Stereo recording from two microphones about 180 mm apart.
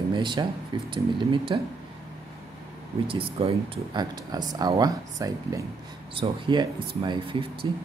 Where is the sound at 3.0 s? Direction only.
30° right (ahead or behind).